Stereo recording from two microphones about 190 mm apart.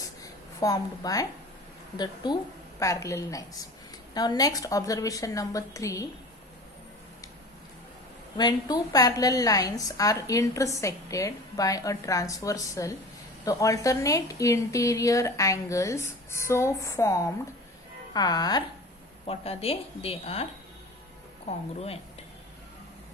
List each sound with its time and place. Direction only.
0.6 s a woman's voice: 20° left (ahead or behind)
8.4 s a woman's voice: 20° left (ahead or behind)
19.2 s a woman's voice: 30° left (ahead or behind)